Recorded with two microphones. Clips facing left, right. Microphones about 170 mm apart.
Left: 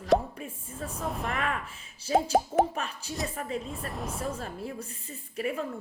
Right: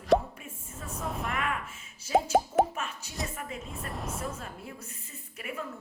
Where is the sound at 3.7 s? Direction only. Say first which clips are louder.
Left 2 dB; centre (ahead or behind).